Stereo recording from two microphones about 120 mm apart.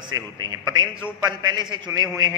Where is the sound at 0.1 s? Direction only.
35° right (ahead or behind).